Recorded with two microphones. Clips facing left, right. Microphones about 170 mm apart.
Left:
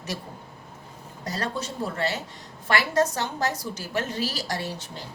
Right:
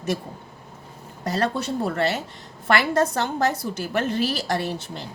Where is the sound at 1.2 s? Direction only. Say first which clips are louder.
Right 6 dB; 60° right (ahead or behind).